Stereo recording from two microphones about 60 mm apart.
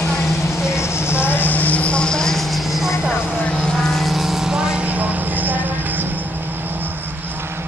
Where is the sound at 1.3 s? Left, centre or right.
Left; by 4.9 s centre.